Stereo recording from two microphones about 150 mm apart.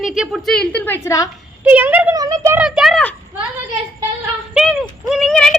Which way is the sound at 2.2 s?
25° right (ahead or behind).